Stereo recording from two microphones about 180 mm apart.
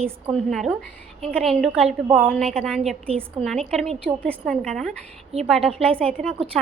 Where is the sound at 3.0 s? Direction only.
35° right (ahead or behind).